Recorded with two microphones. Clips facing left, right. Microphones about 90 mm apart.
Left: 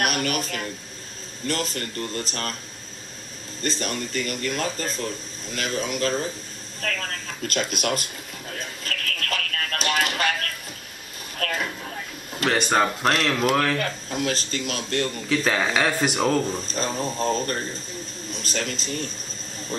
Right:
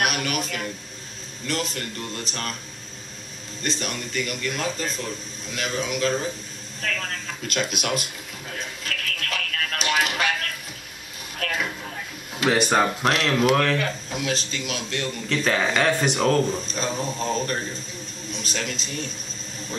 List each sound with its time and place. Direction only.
0.0 s a sound: 40° left (ahead or behind)
1.5 s speech: 40° left (ahead or behind)
3.6 s speech: 40° left (ahead or behind)
7.4 s speech: 40° left (ahead or behind)
8.5 s a sound: 45° left (ahead or behind)
11.3 s a sound: 45° left (ahead or behind)
12.4 s speech: centre (ahead or behind)
13.7 s speech: 40° left (ahead or behind)
15.2 s speech: centre (ahead or behind)
16.6 s speech: 40° left (ahead or behind)